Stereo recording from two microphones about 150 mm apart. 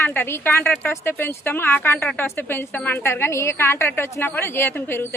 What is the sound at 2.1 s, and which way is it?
Speech, 5° left (ahead or behind).